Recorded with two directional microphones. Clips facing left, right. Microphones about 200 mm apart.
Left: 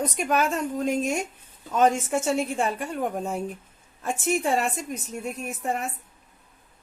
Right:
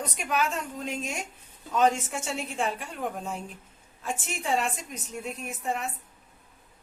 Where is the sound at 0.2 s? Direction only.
45° left (ahead or behind).